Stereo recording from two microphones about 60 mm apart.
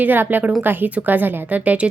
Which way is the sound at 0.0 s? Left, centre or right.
Right.